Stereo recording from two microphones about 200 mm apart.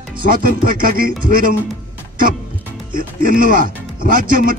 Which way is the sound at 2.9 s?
45° right (ahead or behind).